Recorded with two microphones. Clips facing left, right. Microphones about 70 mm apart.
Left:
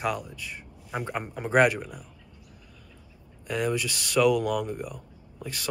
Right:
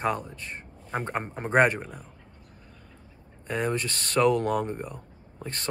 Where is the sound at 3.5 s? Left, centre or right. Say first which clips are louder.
Even; right.